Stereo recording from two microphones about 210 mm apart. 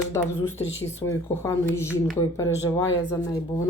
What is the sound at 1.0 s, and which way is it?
Speech, 15° left (ahead or behind).